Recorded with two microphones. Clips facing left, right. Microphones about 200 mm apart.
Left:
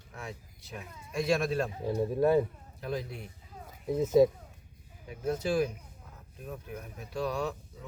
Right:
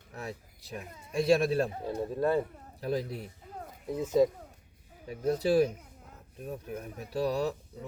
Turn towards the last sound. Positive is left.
turn(degrees=-35)  # may be behind; listen again after turning